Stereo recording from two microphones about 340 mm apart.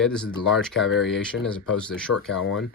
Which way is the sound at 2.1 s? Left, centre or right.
Left.